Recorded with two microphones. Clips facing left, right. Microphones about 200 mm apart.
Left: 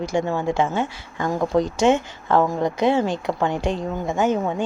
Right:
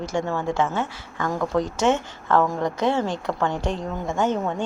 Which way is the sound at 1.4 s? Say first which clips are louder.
Left 4 dB; 30° left (ahead or behind).